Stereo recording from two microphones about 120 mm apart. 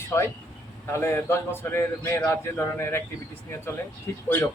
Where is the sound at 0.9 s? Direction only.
20° left (ahead or behind).